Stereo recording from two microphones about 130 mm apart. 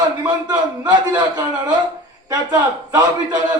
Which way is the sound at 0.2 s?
30° right (ahead or behind).